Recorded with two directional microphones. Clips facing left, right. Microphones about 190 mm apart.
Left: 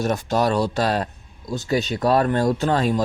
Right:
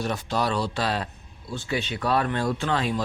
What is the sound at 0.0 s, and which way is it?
Speech, 45° left (ahead or behind).